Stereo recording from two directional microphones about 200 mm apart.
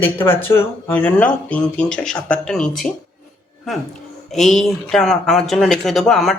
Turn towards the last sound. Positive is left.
turn(degrees=0)  # may be behind; listen again after turning